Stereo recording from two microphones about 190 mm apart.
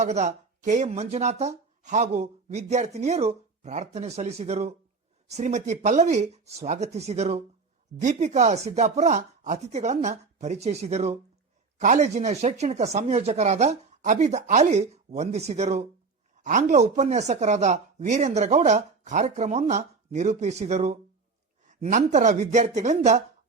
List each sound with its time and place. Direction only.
0.0 s speech: 35° right (ahead or behind)